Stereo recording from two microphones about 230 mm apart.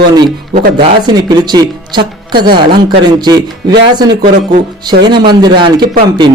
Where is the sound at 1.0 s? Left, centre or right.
Centre.